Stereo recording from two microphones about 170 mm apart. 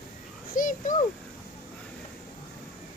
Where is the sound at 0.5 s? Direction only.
50° left (ahead or behind).